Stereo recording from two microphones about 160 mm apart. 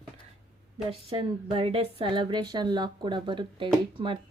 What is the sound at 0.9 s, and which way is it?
Speech, 35° right (ahead or behind).